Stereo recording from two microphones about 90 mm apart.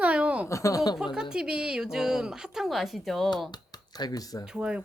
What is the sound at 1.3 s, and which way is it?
A woman's voice, 10° right (ahead or behind).